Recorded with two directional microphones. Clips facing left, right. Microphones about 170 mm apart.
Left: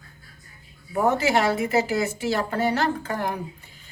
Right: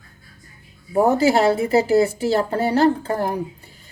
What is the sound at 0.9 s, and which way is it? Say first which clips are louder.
A woman's voice: right 5 dB; 35° right (ahead or behind).